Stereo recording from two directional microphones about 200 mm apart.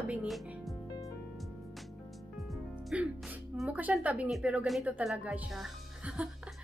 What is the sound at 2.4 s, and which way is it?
Speech, centre (ahead or behind).